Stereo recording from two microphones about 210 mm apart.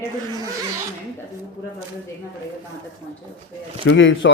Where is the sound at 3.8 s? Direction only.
65° left (ahead or behind).